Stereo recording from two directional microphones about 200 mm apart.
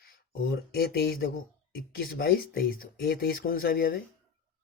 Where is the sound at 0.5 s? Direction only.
50° left (ahead or behind).